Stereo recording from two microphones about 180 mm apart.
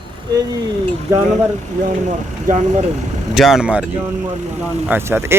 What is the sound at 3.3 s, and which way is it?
Speech, centre (ahead or behind).